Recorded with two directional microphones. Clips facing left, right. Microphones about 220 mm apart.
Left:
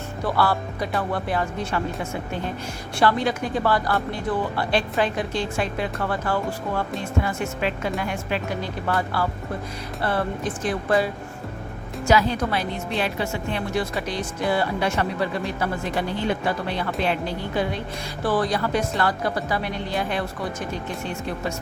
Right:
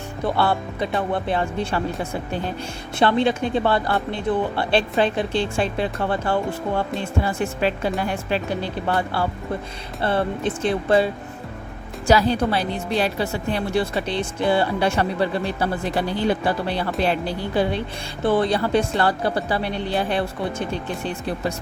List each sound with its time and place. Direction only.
0.3 s a woman's voice: 25° right (ahead or behind)
3.0 s a woman's voice: 25° right (ahead or behind)